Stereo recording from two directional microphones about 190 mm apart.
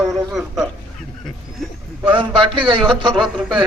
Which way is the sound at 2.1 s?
25° right (ahead or behind).